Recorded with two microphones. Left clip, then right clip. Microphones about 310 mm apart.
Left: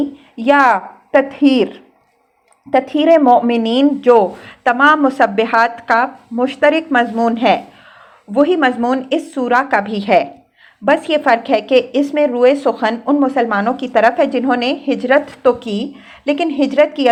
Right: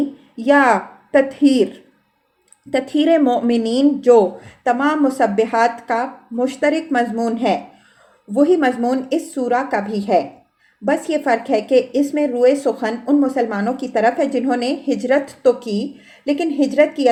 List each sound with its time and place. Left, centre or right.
0.4 s a woman's voice: centre